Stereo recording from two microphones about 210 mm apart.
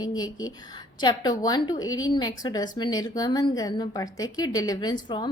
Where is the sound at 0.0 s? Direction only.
20° left (ahead or behind).